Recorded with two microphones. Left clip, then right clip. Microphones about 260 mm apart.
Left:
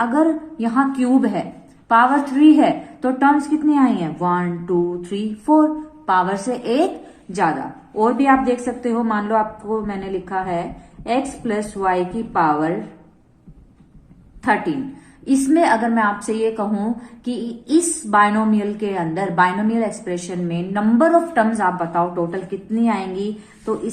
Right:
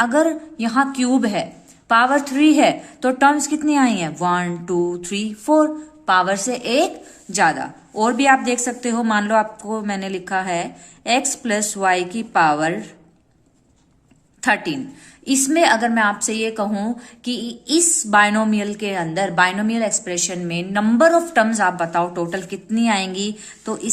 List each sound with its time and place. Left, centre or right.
0.0 s a woman's voice: right
14.4 s a woman's voice: right